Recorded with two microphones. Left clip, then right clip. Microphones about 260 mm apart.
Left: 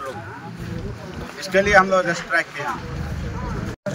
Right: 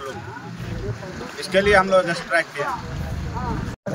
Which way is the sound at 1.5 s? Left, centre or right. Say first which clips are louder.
Left 1 dB; centre.